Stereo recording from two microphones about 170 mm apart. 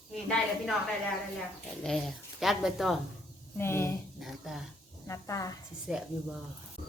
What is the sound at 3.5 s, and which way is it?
Speech, 15° left (ahead or behind).